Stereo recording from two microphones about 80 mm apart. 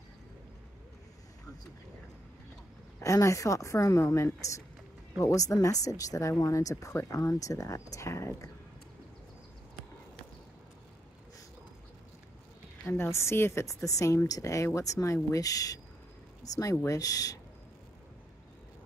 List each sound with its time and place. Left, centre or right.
3.0 s a woman's voice: left
12.8 s a woman's voice: left